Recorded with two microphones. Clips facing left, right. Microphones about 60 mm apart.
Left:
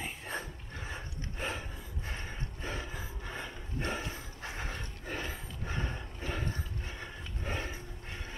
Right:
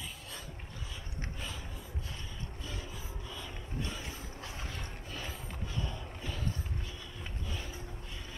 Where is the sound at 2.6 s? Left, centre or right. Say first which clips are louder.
Left 6 dB; left.